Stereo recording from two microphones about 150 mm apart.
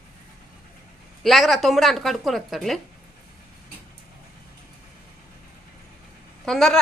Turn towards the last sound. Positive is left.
turn(degrees=0)  # may be behind; listen again after turning